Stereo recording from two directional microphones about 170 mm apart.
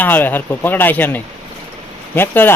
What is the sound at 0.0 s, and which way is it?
Speech, 10° left (ahead or behind).